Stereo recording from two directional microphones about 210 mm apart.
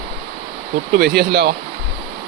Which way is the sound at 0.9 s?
50° right (ahead or behind).